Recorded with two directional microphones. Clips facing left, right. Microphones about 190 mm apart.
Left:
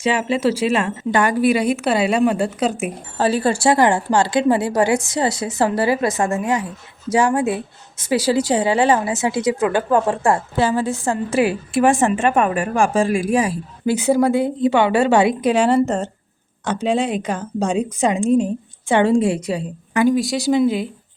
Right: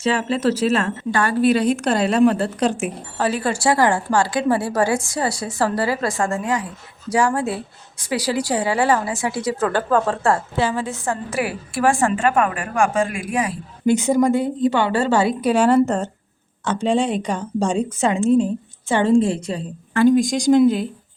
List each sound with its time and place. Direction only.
0.0 s speech: 10° left (ahead or behind)
3.2 s a woman's voice: 30° left (ahead or behind)
10.6 s a woman's voice: 35° left (ahead or behind)
13.8 s speech: 10° left (ahead or behind)